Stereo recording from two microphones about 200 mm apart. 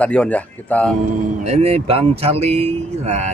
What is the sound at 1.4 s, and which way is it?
Speech, 35° right (ahead or behind).